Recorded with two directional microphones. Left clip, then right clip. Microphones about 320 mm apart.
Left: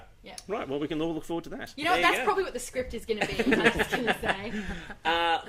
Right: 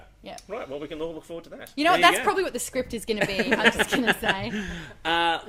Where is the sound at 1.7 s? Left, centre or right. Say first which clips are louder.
Right 6 dB; right.